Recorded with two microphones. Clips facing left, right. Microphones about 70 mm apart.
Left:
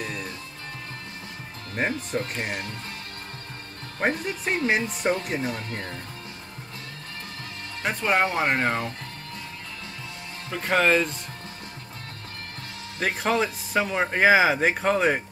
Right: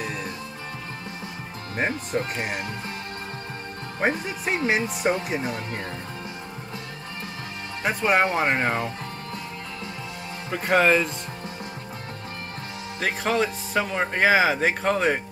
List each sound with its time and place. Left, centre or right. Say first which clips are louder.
0.0 s music: right 2 dB; centre
1.8 s speech: right 1 dB; centre
4.0 s speech: right 1 dB; centre
5.7 s speech: right 2 dB; centre
7.8 s speech: right 2 dB; centre
10.5 s speech: right 2 dB; centre
13.0 s speech: even; centre